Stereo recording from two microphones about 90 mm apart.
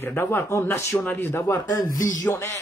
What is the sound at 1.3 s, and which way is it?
Speech, 35° left (ahead or behind).